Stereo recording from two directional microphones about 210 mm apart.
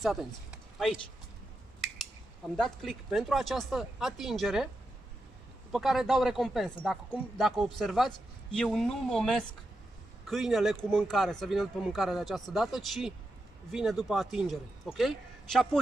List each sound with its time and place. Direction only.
0.0 s speech: centre (ahead or behind)
2.5 s a man's voice: centre (ahead or behind)
5.7 s a man's voice: centre (ahead or behind)